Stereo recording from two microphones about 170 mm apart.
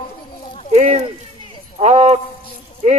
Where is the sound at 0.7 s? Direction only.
40° right (ahead or behind).